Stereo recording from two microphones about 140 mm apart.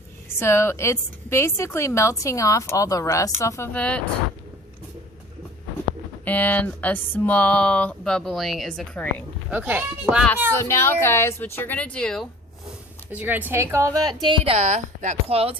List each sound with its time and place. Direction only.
0.3 s a woman's voice: 20° left (ahead or behind)
6.2 s speech: 10° left (ahead or behind)
9.5 s a woman's voice: 15° right (ahead or behind)
10.5 s speech: 20° left (ahead or behind)
13.1 s a woman's voice: 10° right (ahead or behind)
14.3 s a woman's voice: 45° right (ahead or behind)